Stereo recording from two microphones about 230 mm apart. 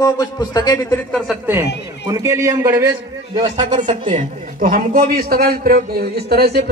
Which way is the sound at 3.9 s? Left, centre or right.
Right.